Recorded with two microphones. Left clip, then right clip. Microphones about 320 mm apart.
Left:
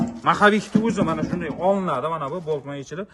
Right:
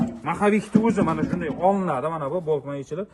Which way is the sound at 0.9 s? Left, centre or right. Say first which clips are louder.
Right 1 dB; centre.